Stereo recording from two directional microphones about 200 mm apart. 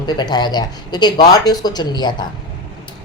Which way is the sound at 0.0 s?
20° left (ahead or behind).